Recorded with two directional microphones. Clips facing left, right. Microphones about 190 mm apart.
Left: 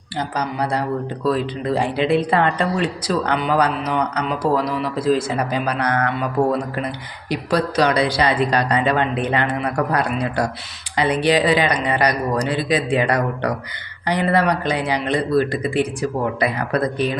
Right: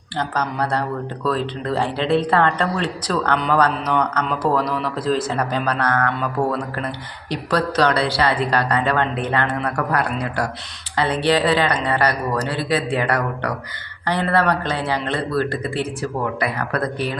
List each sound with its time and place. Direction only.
0.2 s speech: 10° left (ahead or behind)